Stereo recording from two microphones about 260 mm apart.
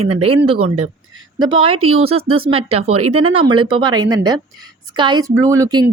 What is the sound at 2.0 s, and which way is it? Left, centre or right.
A woman's voice, right.